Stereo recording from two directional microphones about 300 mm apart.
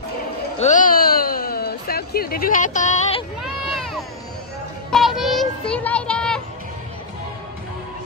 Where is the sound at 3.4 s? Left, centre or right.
Centre.